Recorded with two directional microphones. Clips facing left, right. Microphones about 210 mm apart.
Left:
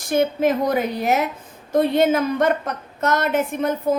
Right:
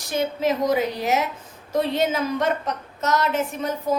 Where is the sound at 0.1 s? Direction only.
55° left (ahead or behind).